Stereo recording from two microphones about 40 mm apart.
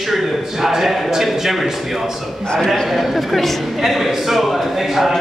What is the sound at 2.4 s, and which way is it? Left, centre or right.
Speech, centre.